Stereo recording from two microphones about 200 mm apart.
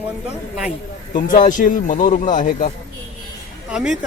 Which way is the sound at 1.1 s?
40° left (ahead or behind).